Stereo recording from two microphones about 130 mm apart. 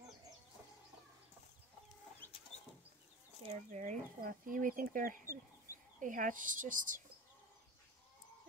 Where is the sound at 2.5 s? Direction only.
65° left (ahead or behind).